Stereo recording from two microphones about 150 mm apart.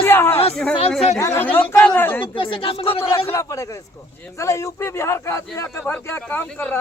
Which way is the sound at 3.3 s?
20° left (ahead or behind).